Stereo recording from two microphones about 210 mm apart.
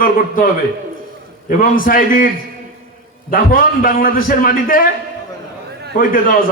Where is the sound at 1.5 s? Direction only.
40° left (ahead or behind).